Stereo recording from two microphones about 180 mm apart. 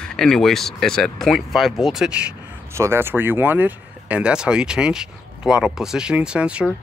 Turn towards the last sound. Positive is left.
turn(degrees=-5)  # may be behind; listen again after turning